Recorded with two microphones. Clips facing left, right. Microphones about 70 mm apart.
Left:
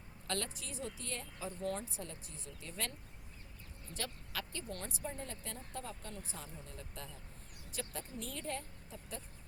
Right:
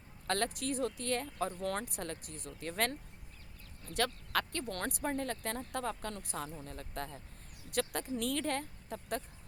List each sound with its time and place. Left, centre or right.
0.3 s speech: right
7.7 s speech: right